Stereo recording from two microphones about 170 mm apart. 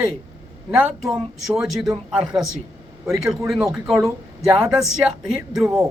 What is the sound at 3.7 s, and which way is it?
Speech, 5° right (ahead or behind).